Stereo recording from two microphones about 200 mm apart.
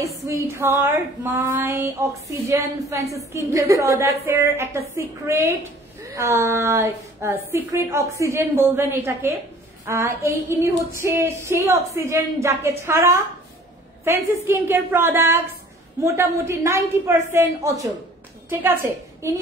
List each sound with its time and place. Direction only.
0.2 s a woman's voice: 15° right (ahead or behind)